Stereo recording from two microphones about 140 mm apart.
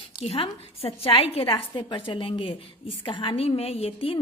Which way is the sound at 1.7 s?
35° left (ahead or behind).